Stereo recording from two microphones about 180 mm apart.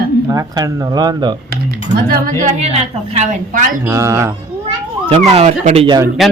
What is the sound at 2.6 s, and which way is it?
A woman's voice, 35° right (ahead or behind).